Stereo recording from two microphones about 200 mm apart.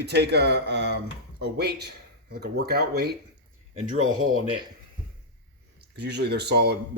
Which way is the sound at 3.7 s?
35° right (ahead or behind).